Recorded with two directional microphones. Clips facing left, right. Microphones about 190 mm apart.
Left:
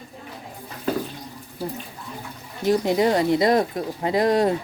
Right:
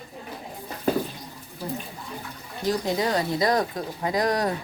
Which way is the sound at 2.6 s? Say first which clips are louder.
Left 5 dB; 20° left (ahead or behind).